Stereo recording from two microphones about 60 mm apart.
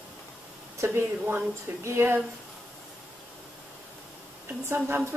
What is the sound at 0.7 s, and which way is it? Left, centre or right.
Speech, right.